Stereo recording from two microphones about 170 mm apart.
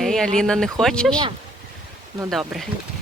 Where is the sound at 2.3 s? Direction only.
Centre (ahead or behind).